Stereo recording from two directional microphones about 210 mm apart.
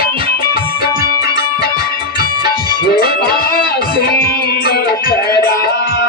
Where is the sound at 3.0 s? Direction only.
45° left (ahead or behind).